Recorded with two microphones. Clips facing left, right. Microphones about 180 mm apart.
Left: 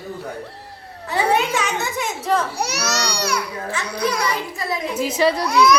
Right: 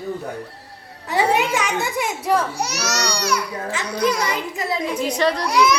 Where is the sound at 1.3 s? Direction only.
10° right (ahead or behind).